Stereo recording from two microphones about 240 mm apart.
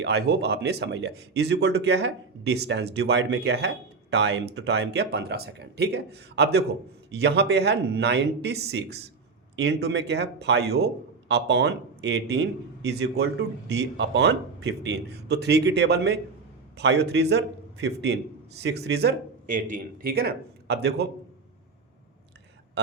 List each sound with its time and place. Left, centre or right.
0.0 s a man's voice: right